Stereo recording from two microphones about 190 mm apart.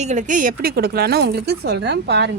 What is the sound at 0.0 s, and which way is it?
Speech, 40° right (ahead or behind).